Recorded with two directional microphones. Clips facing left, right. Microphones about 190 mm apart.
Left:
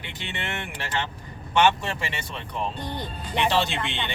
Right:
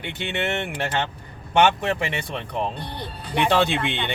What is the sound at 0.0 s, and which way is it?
Speech, 60° right (ahead or behind).